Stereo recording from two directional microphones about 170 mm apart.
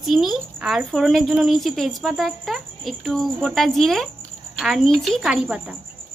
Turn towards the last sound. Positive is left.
turn(degrees=-5)  # may be behind; listen again after turning